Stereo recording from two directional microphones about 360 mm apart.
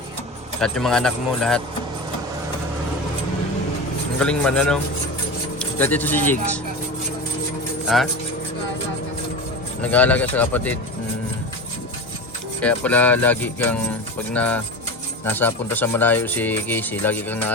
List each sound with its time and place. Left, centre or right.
0.6 s speech: centre
4.2 s speech: centre
7.9 s speech: centre
9.8 s speech: centre
12.6 s speech: centre